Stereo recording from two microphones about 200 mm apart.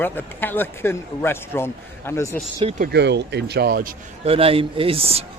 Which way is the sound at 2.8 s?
55° right (ahead or behind).